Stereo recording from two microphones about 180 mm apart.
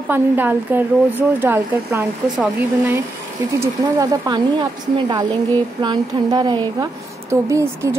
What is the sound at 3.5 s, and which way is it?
Speech, 15° right (ahead or behind).